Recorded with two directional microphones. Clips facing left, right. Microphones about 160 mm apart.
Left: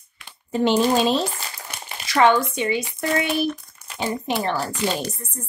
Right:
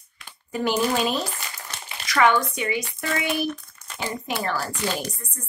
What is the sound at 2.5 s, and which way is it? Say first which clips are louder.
Speech: left 4 dB; 25° left (ahead or behind).